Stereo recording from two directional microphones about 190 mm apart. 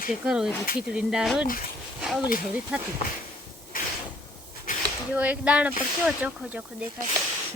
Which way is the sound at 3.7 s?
45° left (ahead or behind).